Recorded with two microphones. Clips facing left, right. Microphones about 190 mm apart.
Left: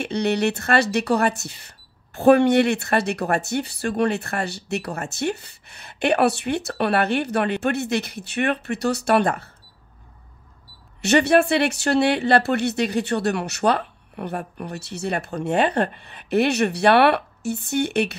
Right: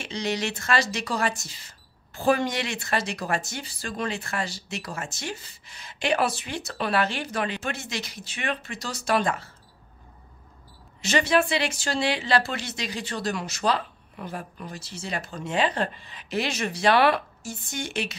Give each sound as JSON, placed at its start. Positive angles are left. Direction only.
{"t": 0.0, "sound": "speech", "side_deg": 60}
{"t": 11.0, "sound": "speech", "side_deg": 65}